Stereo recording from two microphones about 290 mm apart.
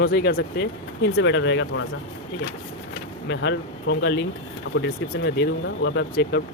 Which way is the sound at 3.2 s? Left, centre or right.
Left.